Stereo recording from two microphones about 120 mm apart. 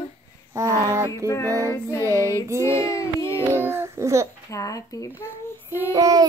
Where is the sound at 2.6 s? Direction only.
25° left (ahead or behind).